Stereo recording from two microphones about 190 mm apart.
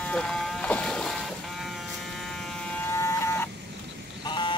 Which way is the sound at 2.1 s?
Centre (ahead or behind).